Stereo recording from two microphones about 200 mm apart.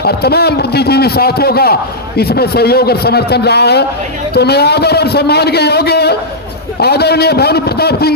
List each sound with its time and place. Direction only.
0.0 s a man's voice: 55° left (ahead or behind)